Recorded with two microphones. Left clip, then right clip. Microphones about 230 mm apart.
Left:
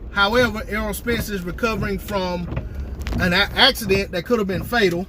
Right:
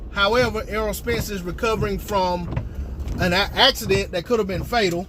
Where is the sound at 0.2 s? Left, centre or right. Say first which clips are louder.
Left 1 dB; left.